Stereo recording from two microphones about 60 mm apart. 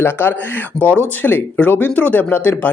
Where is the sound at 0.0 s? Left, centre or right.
Left.